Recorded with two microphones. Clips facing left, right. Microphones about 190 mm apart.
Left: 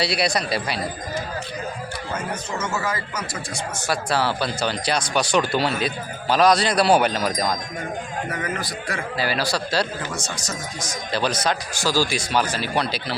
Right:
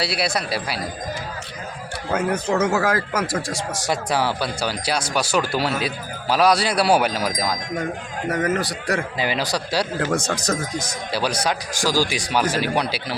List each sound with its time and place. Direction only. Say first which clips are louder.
0.0 s speech: left 1 dB; 5° right (ahead or behind)
2.1 s speech: right 10 dB; 65° right (ahead or behind)
3.8 s speech: even; 15° right (ahead or behind)
8.3 s a man's voice: right 10 dB; 40° right (ahead or behind)
9.1 s speech: even; 15° right (ahead or behind)
10.0 s speech: right 8 dB; 60° right (ahead or behind)
11.1 s speech: even; 10° right (ahead or behind)